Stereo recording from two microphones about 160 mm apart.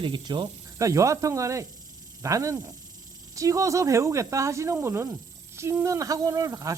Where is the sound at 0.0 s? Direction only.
30° right (ahead or behind).